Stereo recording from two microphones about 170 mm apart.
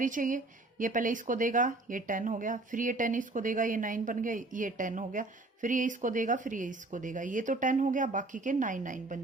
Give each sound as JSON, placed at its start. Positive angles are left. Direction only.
{"t": 0.0, "sound": "speech", "side_deg": -50}